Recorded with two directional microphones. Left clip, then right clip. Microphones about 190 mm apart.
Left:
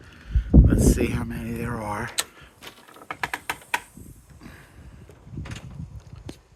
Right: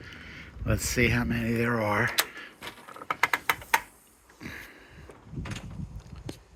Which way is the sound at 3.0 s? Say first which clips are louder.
Right 4 dB; 50° right (ahead or behind).